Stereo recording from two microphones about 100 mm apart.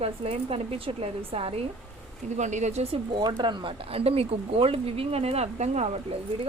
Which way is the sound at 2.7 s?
70° right (ahead or behind).